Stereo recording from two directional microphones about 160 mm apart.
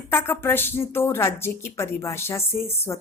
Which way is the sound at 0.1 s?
15° left (ahead or behind).